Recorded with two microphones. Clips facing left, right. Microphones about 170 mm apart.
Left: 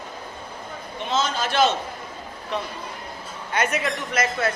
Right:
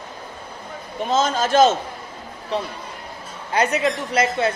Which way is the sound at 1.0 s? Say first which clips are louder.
Right 5 dB; 45° right (ahead or behind).